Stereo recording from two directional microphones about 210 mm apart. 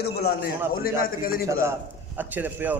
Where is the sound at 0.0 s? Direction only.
50° left (ahead or behind).